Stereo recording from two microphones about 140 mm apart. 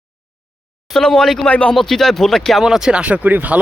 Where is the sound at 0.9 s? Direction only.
5° left (ahead or behind).